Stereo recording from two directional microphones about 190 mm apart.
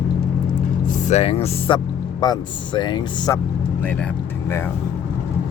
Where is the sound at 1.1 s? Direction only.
35° left (ahead or behind).